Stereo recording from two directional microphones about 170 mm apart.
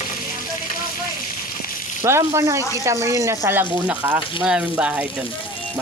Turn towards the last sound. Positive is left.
turn(degrees=-5)  # may be behind; listen again after turning